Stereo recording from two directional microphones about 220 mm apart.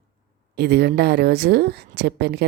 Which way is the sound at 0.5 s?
45° right (ahead or behind).